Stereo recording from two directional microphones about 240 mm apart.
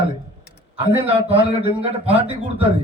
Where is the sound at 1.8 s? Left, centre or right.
Right.